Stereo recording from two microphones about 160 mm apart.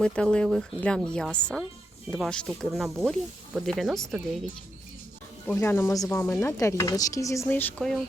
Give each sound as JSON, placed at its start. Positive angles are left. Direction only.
{"t": 0.0, "sound": "speech", "side_deg": 5}
{"t": 5.5, "sound": "speech", "side_deg": 15}